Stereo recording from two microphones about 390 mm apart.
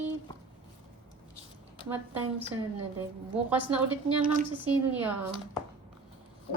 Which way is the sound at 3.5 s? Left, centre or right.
Centre.